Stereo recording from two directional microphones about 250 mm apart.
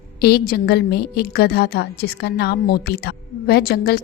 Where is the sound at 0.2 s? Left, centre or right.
Left.